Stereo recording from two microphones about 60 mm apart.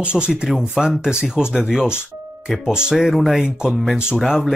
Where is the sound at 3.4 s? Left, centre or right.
Centre.